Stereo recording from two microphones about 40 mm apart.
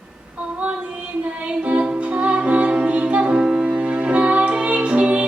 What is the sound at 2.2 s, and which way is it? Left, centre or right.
Music, right.